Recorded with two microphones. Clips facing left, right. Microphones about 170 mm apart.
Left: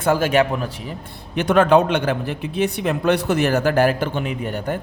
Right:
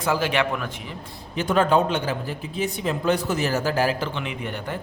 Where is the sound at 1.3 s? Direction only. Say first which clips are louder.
Left 5 dB; 65° left (ahead or behind); by 4.7 s 45° left (ahead or behind).